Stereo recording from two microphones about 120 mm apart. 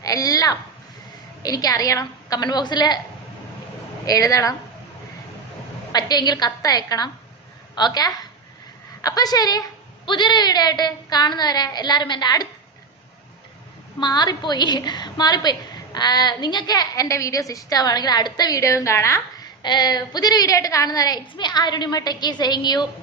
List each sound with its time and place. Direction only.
0.0 s a sound: 30° left (ahead or behind)
1.4 s a woman's voice: 30° left (ahead or behind)
4.0 s speech: 30° left (ahead or behind)
5.9 s a woman's voice: 35° left (ahead or behind)
14.0 s a woman's voice: 35° left (ahead or behind)
19.6 s a woman's voice: 35° left (ahead or behind)